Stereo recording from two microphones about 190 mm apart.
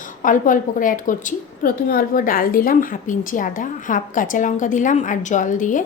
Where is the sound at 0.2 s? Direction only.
45° left (ahead or behind).